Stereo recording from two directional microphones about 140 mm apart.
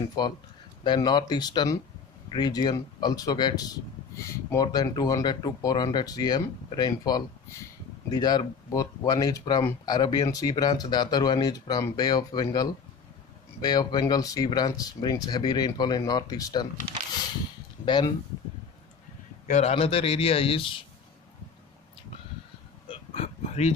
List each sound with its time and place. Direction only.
0.2 s speech: 30° left (ahead or behind)
17.8 s speech: 35° left (ahead or behind)
19.4 s a man's voice: 50° left (ahead or behind)
22.8 s a sound: 50° left (ahead or behind)